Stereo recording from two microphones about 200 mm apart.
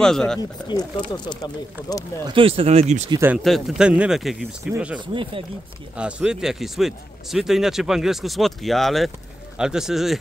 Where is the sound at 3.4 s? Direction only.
Centre (ahead or behind).